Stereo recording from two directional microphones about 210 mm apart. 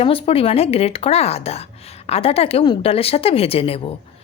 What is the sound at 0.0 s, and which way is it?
A woman's voice, 25° left (ahead or behind).